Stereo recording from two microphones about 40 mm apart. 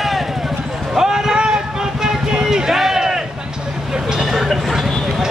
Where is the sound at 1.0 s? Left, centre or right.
Centre.